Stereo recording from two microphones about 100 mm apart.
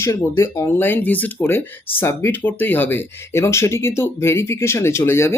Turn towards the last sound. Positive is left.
turn(degrees=25)  # may be behind; listen again after turning